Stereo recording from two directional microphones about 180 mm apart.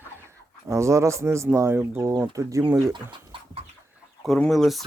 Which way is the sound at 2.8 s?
25° right (ahead or behind).